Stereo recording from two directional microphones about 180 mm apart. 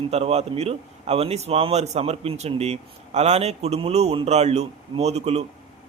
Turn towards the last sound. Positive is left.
turn(degrees=-35)  # may be behind; listen again after turning